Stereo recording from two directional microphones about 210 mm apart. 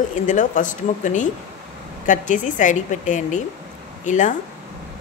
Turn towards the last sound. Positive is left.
turn(degrees=35)  # may be behind; listen again after turning